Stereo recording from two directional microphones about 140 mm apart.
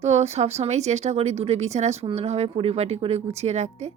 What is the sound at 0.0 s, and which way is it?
Speech, 50° right (ahead or behind).